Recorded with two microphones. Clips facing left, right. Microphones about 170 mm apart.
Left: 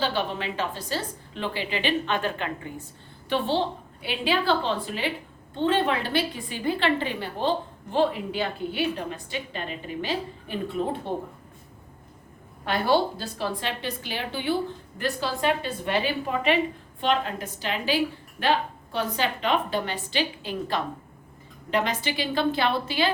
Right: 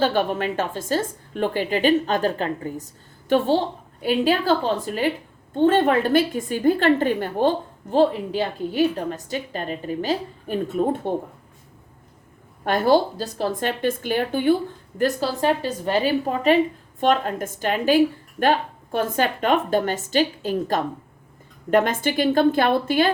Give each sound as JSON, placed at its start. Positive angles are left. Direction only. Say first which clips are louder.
{"t": 0.0, "sound": "a woman's voice", "louder": "right 6 dB", "side_deg": -50}
{"t": 12.6, "sound": "a woman's voice", "louder": "right 5 dB", "side_deg": -45}